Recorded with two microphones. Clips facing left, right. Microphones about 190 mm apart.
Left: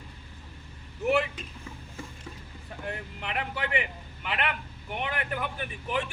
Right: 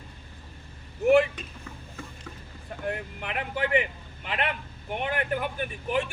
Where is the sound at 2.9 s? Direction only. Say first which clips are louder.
Right 1 dB; 50° right (ahead or behind).